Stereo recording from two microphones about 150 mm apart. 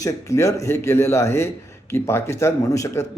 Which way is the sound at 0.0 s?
20° left (ahead or behind).